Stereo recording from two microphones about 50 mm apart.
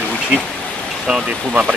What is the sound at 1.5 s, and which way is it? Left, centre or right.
Speech, right.